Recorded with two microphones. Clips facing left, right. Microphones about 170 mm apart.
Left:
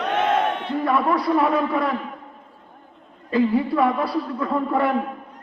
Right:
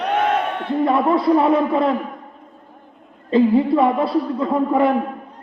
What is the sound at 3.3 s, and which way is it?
A man's voice, 25° right (ahead or behind).